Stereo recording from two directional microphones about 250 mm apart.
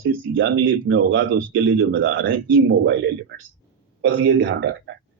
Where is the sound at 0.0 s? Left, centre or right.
Right.